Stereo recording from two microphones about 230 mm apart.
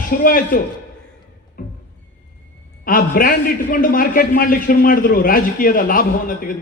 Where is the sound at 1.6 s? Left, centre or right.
Left.